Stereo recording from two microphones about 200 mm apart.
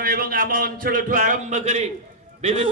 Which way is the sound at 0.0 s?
45° right (ahead or behind).